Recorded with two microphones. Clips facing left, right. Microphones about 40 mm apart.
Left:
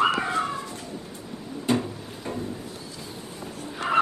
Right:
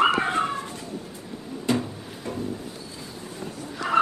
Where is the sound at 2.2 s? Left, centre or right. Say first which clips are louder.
Even; left.